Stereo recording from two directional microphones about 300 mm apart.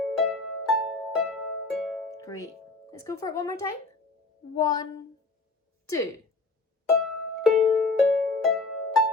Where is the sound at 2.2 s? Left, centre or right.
Centre.